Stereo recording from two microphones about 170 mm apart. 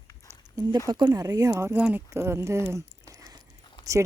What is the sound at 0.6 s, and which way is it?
Speech, 20° right (ahead or behind).